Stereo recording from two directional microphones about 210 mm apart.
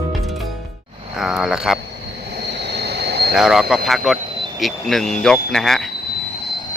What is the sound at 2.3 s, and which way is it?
Vehicle, 55° right (ahead or behind).